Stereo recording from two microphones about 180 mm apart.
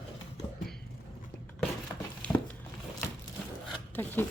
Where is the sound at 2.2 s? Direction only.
10° left (ahead or behind).